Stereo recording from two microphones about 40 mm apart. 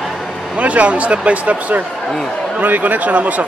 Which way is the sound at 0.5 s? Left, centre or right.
Right.